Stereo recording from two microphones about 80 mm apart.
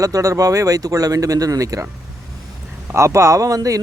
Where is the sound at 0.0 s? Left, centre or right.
Right.